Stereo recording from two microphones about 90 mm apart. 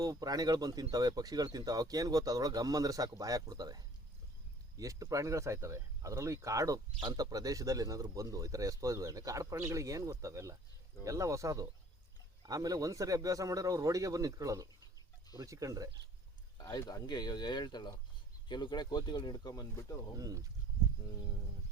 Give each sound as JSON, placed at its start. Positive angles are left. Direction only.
{"t": 0.0, "sound": "speech", "side_deg": -45}
{"t": 16.6, "sound": "speech", "side_deg": 45}
{"t": 20.1, "sound": "speech", "side_deg": -40}